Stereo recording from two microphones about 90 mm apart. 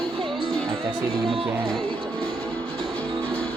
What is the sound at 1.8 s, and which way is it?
Music, 75° right (ahead or behind).